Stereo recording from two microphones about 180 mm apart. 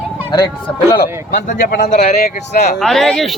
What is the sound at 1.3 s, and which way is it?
Speech, 45° left (ahead or behind).